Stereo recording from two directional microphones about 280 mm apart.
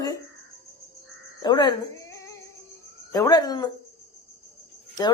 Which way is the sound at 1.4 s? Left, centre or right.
Centre.